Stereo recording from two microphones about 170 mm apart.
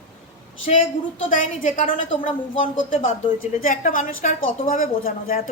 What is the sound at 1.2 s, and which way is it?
A woman's voice, 50° left (ahead or behind).